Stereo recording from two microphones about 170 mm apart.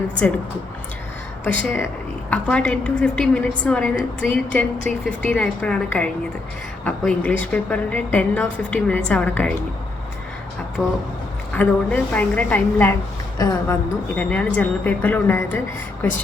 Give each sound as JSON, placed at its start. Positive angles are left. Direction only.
{"t": 1.5, "sound": "a woman's voice", "side_deg": 10}
{"t": 10.8, "sound": "a woman's voice", "side_deg": 5}
{"t": 13.4, "sound": "a woman's voice", "side_deg": 20}
{"t": 14.2, "sound": "a woman's voice", "side_deg": 5}